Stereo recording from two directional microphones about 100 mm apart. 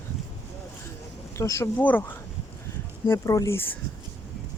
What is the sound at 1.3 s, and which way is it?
Speech, 30° left (ahead or behind).